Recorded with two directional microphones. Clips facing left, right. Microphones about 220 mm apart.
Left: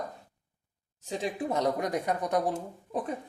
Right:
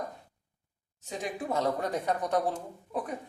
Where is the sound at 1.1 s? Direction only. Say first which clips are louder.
Left 2 dB; 20° left (ahead or behind).